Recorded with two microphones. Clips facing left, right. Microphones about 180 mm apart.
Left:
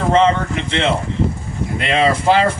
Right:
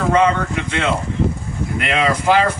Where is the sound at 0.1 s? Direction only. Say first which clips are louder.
Left 2 dB; 25° left (ahead or behind).